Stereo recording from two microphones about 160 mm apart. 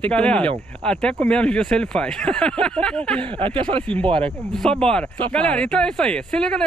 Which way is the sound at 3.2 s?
35° right (ahead or behind).